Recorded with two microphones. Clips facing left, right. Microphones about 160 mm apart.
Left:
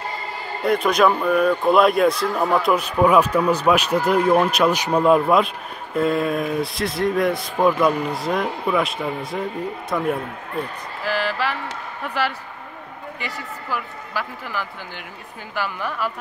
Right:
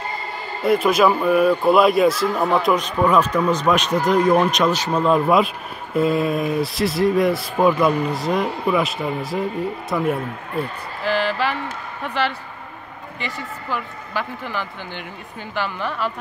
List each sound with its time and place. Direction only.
0.6 s a man's voice: 5° right (ahead or behind)
5.9 s a man's voice: centre (ahead or behind)